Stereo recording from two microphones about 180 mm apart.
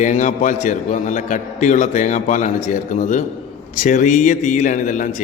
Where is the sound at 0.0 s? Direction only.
45° left (ahead or behind).